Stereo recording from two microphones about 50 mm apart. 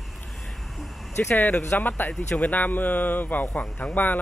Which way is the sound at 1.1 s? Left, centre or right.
Left.